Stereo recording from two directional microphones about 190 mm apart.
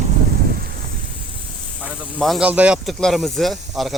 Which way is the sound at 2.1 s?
5° right (ahead or behind).